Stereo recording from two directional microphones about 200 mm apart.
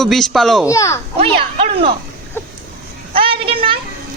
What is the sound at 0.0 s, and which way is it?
Speech, centre (ahead or behind).